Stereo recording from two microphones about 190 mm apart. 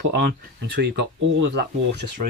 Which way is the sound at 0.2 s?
60° right (ahead or behind).